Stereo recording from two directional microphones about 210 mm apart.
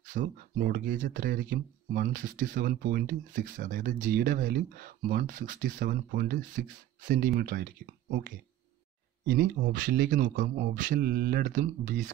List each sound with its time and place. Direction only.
0.1 s speech: 40° right (ahead or behind)
9.2 s speech: 55° right (ahead or behind)
9.6 s speech: 40° right (ahead or behind)